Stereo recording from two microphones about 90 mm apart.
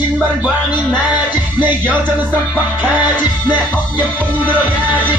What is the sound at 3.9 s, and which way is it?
Music, 20° right (ahead or behind).